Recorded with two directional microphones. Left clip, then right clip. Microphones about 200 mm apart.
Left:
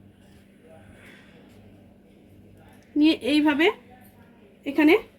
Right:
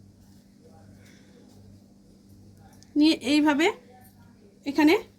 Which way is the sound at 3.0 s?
40° right (ahead or behind).